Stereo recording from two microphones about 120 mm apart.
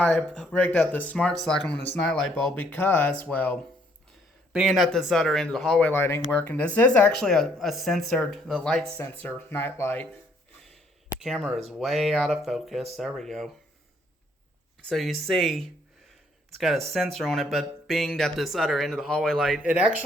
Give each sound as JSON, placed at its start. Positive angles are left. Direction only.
{"t": 0.0, "sound": "speech", "side_deg": 5}
{"t": 4.5, "sound": "speech", "side_deg": -5}
{"t": 5.8, "sound": "speech", "side_deg": 20}
{"t": 8.9, "sound": "speech", "side_deg": 15}
{"t": 11.2, "sound": "speech", "side_deg": 0}
{"t": 14.8, "sound": "speech", "side_deg": 0}
{"t": 19.6, "sound": "speech", "side_deg": -15}